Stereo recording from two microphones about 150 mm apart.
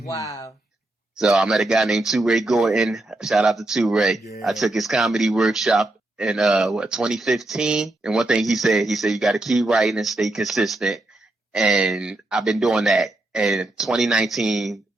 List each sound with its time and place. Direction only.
0.0 s speech: 20° left (ahead or behind)
1.2 s speech: 5° right (ahead or behind)